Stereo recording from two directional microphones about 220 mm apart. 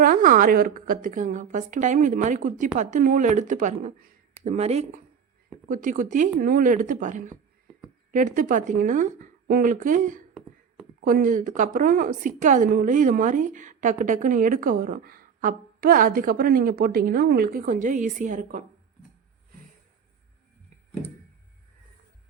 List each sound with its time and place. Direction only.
0.0 s a woman's voice: 40° right (ahead or behind)